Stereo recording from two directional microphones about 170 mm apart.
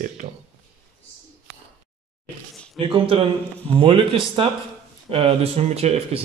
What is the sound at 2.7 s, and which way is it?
A man's voice, 30° right (ahead or behind).